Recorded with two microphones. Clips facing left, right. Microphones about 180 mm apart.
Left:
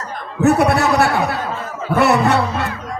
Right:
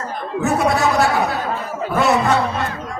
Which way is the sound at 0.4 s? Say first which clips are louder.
Left 4 dB; 65° left (ahead or behind).